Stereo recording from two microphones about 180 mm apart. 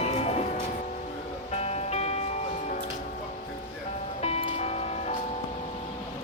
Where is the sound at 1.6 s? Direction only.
35° left (ahead or behind).